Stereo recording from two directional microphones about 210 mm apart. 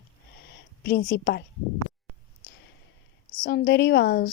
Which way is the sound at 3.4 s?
50° left (ahead or behind).